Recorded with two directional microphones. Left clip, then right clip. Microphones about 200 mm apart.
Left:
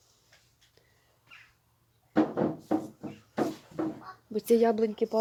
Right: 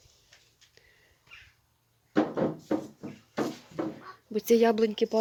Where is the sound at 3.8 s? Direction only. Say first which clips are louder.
Left 1 dB; 45° right (ahead or behind).